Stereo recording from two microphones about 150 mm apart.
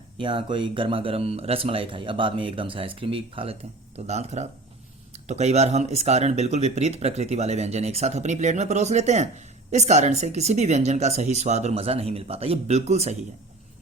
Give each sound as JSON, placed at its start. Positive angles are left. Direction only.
{"t": 0.2, "sound": "speech", "side_deg": -35}